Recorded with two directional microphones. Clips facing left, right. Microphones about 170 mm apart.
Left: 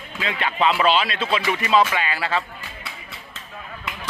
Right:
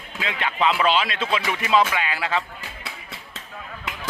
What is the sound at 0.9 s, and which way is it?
Speech, 10° right (ahead or behind).